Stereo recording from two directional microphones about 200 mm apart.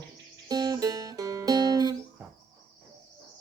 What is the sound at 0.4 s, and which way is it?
Music, 20° right (ahead or behind).